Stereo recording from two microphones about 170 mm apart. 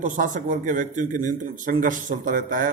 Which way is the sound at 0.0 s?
45° right (ahead or behind).